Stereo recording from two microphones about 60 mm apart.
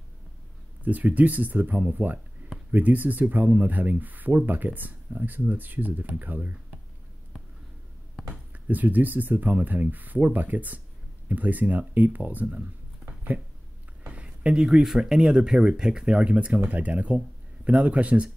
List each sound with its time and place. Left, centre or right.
0.8 s speech: right
8.6 s speech: right